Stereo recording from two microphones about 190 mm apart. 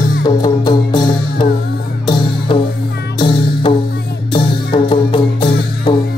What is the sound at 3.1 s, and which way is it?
Music, 25° left (ahead or behind).